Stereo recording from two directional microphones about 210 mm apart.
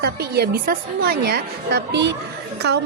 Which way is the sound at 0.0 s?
50° right (ahead or behind).